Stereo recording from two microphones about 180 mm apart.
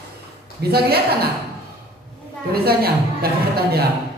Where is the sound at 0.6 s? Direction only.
65° right (ahead or behind).